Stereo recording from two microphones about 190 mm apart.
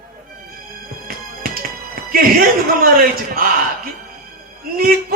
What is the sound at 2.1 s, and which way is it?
A man's voice, 50° right (ahead or behind).